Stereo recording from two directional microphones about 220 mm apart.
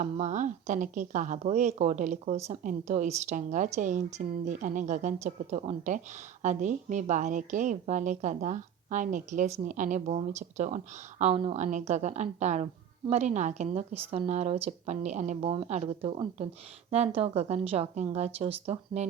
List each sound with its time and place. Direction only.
0.0 s a woman's voice: 30° right (ahead or behind)